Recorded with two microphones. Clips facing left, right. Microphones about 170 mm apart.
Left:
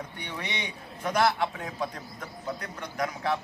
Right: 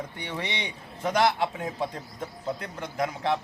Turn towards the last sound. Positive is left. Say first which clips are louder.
# right 2 dB
turn(degrees=-25)  # may be behind; listen again after turning